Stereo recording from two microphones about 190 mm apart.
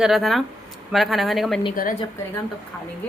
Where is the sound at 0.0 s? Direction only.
Centre (ahead or behind).